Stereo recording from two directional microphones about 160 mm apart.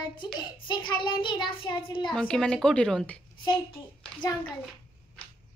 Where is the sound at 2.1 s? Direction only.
5° left (ahead or behind).